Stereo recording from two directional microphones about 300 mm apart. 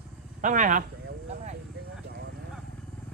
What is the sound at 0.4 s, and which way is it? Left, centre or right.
Speech, right.